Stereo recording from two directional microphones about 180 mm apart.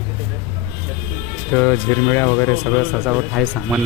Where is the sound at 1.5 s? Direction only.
15° left (ahead or behind).